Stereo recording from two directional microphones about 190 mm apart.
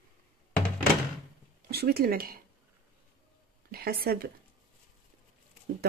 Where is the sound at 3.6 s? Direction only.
55° right (ahead or behind).